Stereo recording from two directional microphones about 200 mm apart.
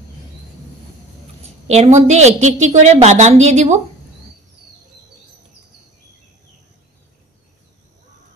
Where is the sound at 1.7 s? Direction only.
35° right (ahead or behind).